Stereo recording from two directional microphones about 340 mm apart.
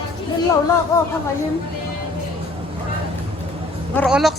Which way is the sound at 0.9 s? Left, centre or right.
Centre.